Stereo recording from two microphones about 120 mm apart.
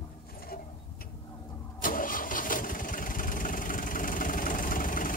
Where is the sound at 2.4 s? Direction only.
90° left.